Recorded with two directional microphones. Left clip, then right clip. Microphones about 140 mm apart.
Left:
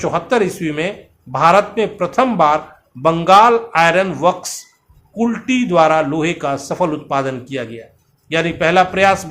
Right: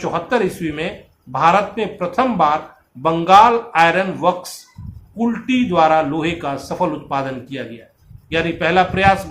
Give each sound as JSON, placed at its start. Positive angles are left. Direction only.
{"t": 0.0, "sound": "a man's voice", "side_deg": 65}